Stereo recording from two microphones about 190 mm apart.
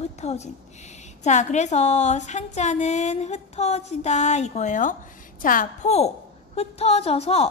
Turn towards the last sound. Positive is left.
turn(degrees=30)  # may be behind; listen again after turning